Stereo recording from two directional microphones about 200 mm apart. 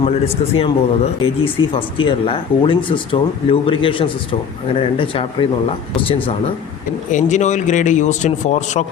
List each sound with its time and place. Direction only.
0.0 s speech: 30° left (ahead or behind)
7.1 s speech: 35° left (ahead or behind)